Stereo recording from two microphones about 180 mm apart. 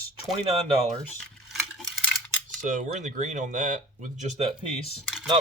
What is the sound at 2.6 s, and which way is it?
Speech, 45° right (ahead or behind).